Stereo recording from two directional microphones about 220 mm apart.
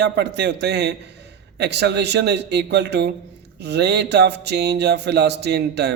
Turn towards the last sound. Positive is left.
turn(degrees=-50)  # may be behind; listen again after turning